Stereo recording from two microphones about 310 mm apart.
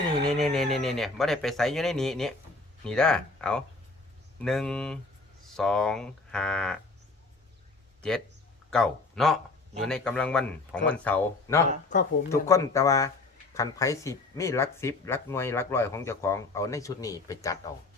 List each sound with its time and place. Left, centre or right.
0.3 s speech: centre
8.7 s speech: centre
11.9 s speech: left
12.3 s speech: centre